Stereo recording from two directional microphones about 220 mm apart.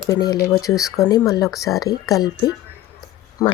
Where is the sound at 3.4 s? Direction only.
15° left (ahead or behind).